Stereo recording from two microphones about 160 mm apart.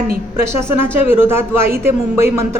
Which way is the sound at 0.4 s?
15° right (ahead or behind).